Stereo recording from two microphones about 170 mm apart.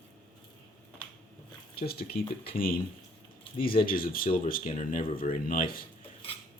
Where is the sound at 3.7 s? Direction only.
55° left (ahead or behind).